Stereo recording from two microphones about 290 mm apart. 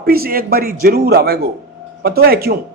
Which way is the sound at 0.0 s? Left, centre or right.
Right.